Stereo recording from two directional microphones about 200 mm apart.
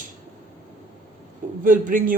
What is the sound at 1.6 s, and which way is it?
Speech, 40° right (ahead or behind).